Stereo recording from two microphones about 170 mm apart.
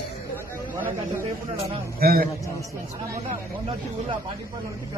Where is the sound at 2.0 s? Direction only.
60° right (ahead or behind).